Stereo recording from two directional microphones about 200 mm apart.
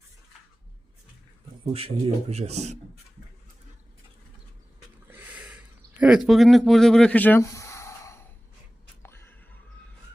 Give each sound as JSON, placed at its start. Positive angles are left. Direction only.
{"t": 1.7, "sound": "a man's voice", "side_deg": -30}
{"t": 5.0, "sound": "a sound", "side_deg": -10}
{"t": 6.0, "sound": "speech", "side_deg": 0}
{"t": 9.0, "sound": "music", "side_deg": 10}